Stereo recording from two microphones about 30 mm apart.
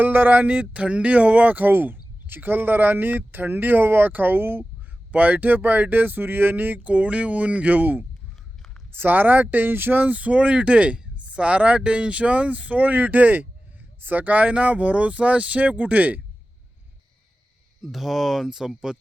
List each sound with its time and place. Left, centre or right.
0.0 s a sound: right
0.4 s speech: right
5.1 s speech: right
5.5 s speech: right
6.9 s speech: right
9.0 s speech: right
10.1 s speech: right
17.8 s speech: centre
18.9 s speech: right